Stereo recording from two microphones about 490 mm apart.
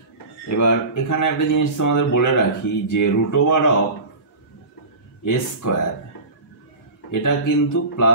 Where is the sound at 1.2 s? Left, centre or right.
Left.